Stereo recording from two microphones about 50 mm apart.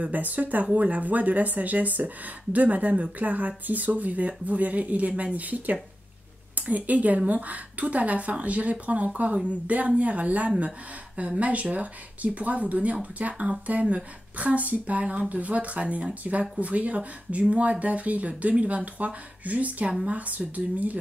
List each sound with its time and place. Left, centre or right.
0.0 s speech: right